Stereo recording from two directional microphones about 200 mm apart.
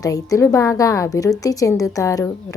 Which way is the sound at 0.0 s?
15° left (ahead or behind).